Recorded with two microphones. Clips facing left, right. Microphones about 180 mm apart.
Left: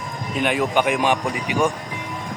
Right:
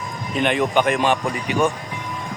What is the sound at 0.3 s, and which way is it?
A man's voice, 5° left (ahead or behind).